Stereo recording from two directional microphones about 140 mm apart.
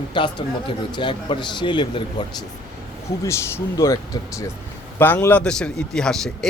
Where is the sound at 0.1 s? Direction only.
35° left (ahead or behind).